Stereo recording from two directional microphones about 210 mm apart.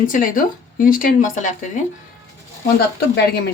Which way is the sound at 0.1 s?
40° left (ahead or behind).